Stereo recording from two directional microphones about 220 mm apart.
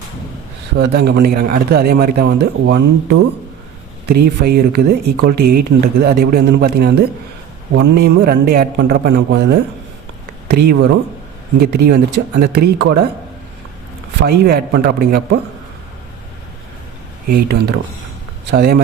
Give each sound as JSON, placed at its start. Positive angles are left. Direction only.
{"t": 0.8, "sound": "speech", "side_deg": -45}
{"t": 14.2, "sound": "speech", "side_deg": -45}
{"t": 17.2, "sound": "speech", "side_deg": -45}